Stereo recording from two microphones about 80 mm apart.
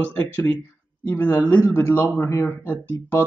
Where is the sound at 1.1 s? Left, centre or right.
Left.